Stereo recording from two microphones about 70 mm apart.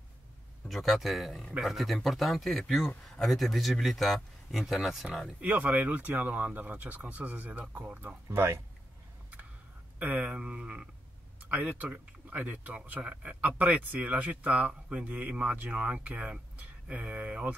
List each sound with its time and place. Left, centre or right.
0.7 s a man's voice: centre
5.4 s speech: right
8.3 s speech: right
9.9 s speech: centre